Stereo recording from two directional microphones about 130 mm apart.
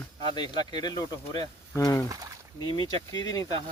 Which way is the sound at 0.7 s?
30° left (ahead or behind).